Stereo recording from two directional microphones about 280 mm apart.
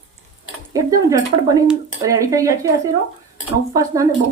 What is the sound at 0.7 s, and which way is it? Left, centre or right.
Speech, centre.